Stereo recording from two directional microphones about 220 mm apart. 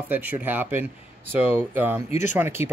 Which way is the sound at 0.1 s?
10° right (ahead or behind).